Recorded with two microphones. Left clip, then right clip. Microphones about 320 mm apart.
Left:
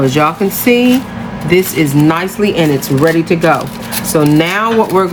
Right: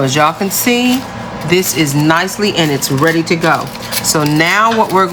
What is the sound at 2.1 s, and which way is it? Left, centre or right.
Speech, centre.